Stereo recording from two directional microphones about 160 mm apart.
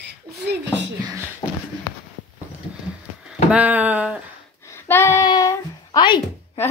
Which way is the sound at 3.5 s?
10° right (ahead or behind).